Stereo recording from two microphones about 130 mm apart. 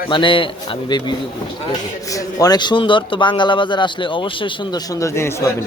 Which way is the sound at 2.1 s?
30° left (ahead or behind).